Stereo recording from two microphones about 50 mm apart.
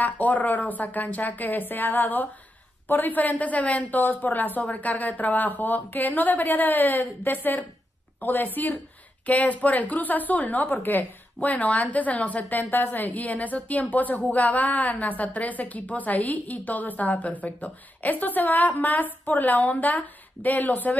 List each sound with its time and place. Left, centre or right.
0.0 s a woman's voice: left